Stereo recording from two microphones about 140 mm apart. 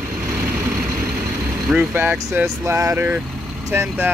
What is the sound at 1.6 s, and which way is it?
Speech, 10° right (ahead or behind).